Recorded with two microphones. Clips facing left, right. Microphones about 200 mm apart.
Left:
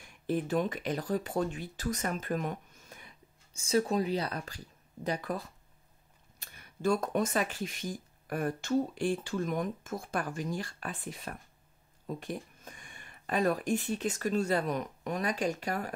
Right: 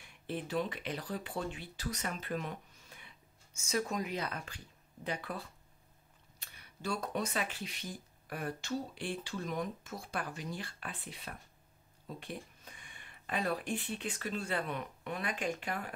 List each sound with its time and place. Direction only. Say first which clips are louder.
0.0 s speech: left 8 dB; 45° left (ahead or behind)
3.5 s speech: left 7 dB; 30° left (ahead or behind)
6.4 s speech: left 10 dB; 50° left (ahead or behind)